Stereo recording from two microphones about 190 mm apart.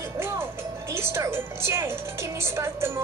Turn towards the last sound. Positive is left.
turn(degrees=-15)  # may be behind; listen again after turning